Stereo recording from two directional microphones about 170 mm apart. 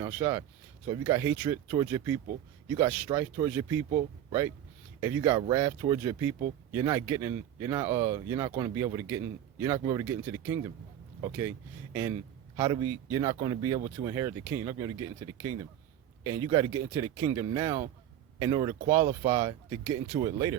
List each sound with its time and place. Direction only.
0.0 s speech: 15° right (ahead or behind)
12.5 s speech: 25° right (ahead or behind)
16.2 s speech: 20° right (ahead or behind)